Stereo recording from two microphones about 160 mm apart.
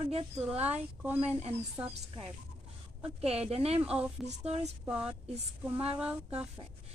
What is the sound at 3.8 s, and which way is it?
Speech, 10° right (ahead or behind).